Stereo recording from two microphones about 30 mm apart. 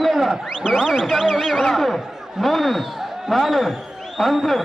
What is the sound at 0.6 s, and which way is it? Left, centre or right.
Speech, centre.